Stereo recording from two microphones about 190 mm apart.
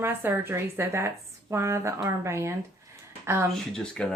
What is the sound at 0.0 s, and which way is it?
Speech, 10° right (ahead or behind).